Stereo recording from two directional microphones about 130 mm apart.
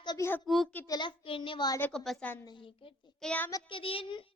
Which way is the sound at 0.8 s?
30° left (ahead or behind).